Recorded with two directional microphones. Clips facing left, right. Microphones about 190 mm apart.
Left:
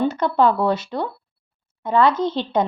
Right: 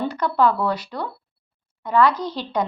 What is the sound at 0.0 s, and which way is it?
A woman's voice, 25° left (ahead or behind).